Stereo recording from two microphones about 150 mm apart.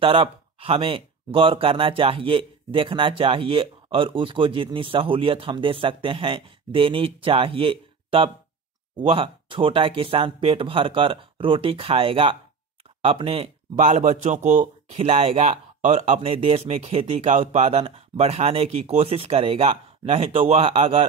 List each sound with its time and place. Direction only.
0.0 s speech: 35° right (ahead or behind)